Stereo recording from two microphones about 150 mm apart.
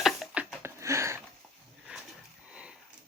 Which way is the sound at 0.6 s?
20° right (ahead or behind).